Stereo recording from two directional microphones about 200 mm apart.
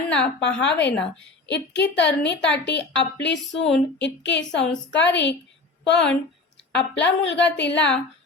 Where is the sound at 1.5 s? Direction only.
60° left (ahead or behind).